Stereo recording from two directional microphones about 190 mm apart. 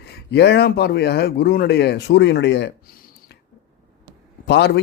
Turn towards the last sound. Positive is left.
turn(degrees=60)  # may be behind; listen again after turning